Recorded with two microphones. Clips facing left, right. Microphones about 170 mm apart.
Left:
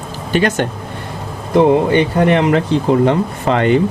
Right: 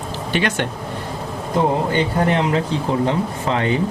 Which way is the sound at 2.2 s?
65° left (ahead or behind).